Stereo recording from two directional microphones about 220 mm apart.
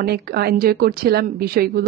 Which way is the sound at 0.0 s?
45° right (ahead or behind).